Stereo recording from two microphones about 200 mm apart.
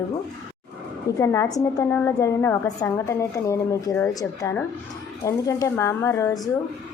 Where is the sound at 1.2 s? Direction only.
15° left (ahead or behind).